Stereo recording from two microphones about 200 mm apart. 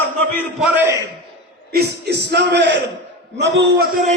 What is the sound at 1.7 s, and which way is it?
A man's voice, 55° right (ahead or behind).